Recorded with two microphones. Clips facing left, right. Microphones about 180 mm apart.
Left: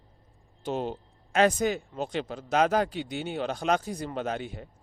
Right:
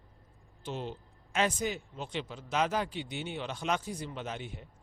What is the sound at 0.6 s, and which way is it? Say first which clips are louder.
Speech: left 7 dB; 45° left (ahead or behind).